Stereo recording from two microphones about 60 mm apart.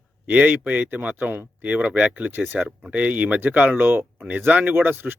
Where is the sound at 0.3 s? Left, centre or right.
Right.